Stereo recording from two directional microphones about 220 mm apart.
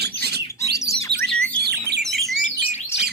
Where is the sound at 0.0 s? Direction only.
45° right (ahead or behind).